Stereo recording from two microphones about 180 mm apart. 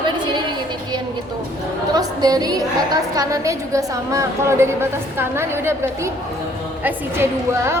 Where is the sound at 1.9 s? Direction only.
20° right (ahead or behind).